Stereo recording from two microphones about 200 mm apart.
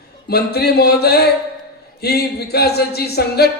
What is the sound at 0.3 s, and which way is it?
Speech, 55° left (ahead or behind).